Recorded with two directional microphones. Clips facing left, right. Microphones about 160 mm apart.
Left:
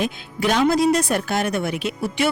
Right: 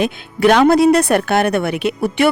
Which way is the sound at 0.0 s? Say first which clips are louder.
Right 8 dB; 65° right (ahead or behind).